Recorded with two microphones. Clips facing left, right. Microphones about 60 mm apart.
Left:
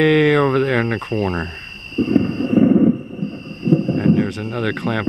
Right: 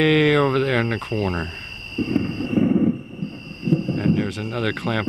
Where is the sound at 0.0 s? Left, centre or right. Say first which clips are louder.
Left 3 dB; centre.